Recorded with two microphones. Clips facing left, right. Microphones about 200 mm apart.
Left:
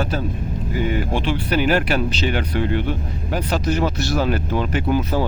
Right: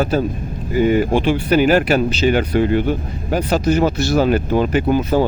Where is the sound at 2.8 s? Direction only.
45° right (ahead or behind).